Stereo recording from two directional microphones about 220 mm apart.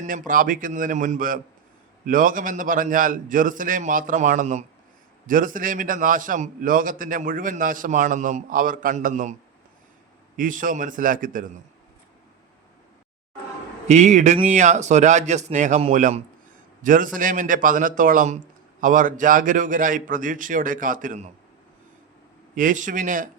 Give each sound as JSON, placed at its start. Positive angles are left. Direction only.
{"t": 0.0, "sound": "a man's voice", "side_deg": -40}
{"t": 10.3, "sound": "a man's voice", "side_deg": -40}
{"t": 13.8, "sound": "a man's voice", "side_deg": -30}
{"t": 22.5, "sound": "a man's voice", "side_deg": -35}